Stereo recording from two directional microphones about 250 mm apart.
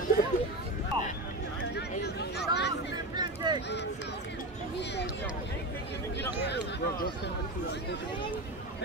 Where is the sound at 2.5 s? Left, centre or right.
Left.